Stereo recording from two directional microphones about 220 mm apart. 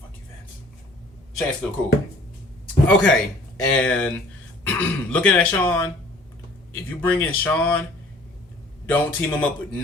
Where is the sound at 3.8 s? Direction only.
5° left (ahead or behind).